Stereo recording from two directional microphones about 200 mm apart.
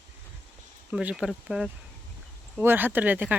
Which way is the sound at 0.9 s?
5° right (ahead or behind).